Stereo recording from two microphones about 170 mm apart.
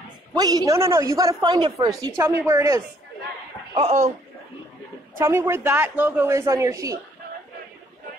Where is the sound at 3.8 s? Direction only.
40° right (ahead or behind).